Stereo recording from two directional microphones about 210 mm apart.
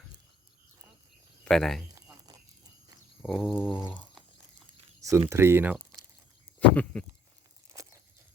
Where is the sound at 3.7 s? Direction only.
25° left (ahead or behind).